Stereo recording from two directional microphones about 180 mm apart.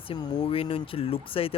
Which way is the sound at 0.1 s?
30° left (ahead or behind).